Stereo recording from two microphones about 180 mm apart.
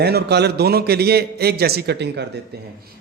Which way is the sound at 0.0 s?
65° right (ahead or behind).